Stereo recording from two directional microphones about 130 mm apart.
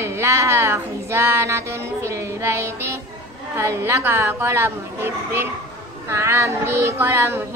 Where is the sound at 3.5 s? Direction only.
20° right (ahead or behind).